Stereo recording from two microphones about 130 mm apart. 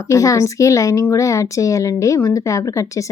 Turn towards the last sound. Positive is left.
turn(degrees=25)  # may be behind; listen again after turning